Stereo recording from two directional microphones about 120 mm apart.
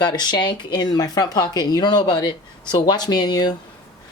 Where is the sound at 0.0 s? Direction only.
35° left (ahead or behind).